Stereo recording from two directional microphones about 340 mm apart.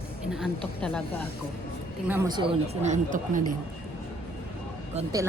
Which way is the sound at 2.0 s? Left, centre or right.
Centre.